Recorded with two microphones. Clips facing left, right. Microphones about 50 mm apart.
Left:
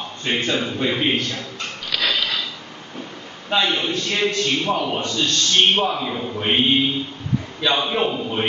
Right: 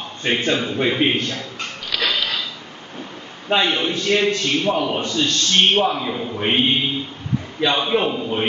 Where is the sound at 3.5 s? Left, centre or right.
Centre.